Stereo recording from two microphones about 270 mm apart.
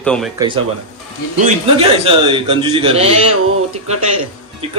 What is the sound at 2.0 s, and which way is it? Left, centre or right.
A man's voice, centre.